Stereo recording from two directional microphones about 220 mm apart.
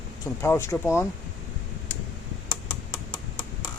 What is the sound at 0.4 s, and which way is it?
Speech, 10° left (ahead or behind).